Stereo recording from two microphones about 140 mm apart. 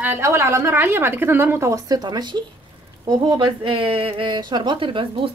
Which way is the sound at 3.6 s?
40° right (ahead or behind).